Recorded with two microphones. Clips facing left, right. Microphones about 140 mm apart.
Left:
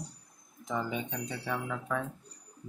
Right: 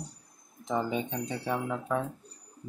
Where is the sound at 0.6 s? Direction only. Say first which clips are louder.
Right 4 dB; 30° right (ahead or behind).